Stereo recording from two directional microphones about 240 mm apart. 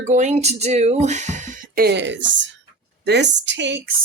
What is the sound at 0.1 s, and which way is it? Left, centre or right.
A woman's voice, right.